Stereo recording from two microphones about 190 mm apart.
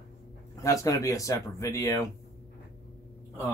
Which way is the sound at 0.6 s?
15° left (ahead or behind).